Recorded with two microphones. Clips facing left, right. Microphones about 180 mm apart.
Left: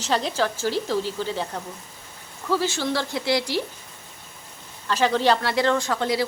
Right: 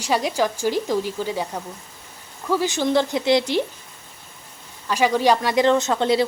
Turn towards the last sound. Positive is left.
turn(degrees=-25)  # may be behind; listen again after turning